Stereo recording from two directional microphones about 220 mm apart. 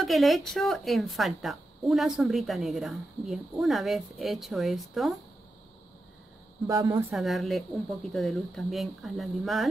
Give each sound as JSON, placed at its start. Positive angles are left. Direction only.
{"t": 0.0, "sound": "speech", "side_deg": 0}
{"t": 6.7, "sound": "speech", "side_deg": -10}
{"t": 7.2, "sound": "speech", "side_deg": 0}